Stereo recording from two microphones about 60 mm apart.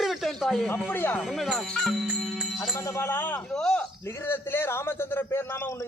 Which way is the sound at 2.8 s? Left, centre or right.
Left.